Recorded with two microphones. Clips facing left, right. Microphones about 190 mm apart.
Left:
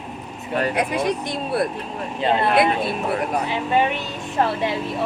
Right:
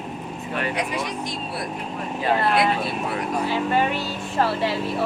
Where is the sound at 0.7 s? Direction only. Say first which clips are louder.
Left 5 dB; 55° left (ahead or behind).